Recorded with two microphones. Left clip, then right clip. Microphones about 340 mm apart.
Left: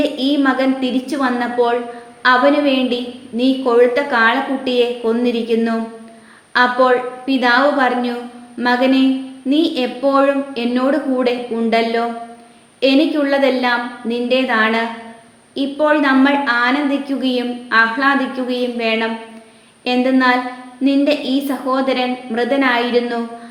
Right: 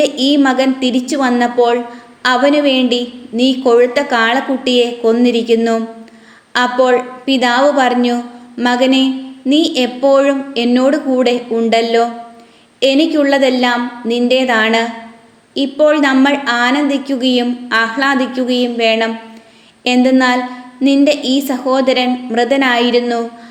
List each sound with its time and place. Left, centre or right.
0.0 s a woman's voice: right